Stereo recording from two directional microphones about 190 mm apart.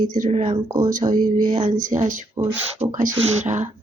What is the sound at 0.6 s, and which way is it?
Speech, 20° right (ahead or behind).